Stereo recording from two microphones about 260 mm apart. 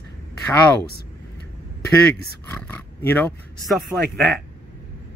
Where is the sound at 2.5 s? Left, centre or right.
Centre.